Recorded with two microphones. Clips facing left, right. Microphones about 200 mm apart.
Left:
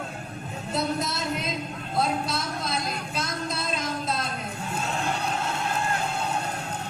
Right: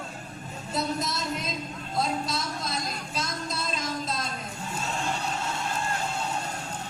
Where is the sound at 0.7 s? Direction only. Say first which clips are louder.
Left 2 dB; 60° left (ahead or behind).